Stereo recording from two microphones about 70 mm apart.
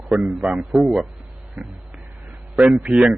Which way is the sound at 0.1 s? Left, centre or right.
Centre.